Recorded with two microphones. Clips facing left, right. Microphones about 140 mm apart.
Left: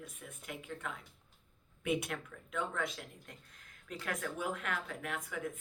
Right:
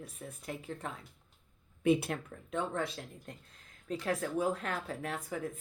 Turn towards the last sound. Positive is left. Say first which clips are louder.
# right 3 dB
turn(degrees=-35)  # may be behind; listen again after turning